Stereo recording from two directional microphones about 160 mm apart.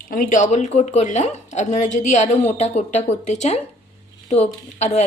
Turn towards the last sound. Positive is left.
turn(degrees=45)  # may be behind; listen again after turning